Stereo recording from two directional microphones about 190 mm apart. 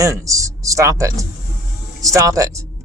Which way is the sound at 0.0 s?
15° right (ahead or behind).